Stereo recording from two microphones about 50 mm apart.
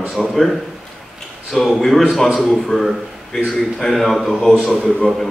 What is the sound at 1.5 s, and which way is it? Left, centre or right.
A man's voice, centre.